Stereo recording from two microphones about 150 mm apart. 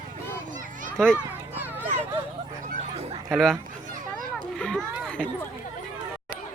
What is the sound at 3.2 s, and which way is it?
Speech, centre (ahead or behind).